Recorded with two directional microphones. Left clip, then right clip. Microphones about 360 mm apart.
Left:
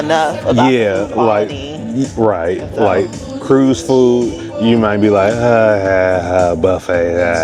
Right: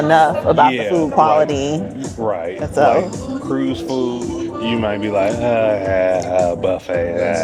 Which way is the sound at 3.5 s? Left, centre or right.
Left.